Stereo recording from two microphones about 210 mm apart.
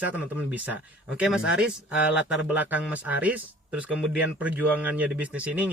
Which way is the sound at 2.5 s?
10° right (ahead or behind).